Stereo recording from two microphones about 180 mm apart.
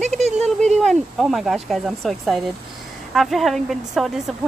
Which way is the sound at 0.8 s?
Centre (ahead or behind).